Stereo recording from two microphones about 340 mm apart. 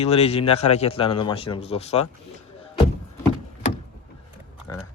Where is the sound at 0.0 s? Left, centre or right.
Centre.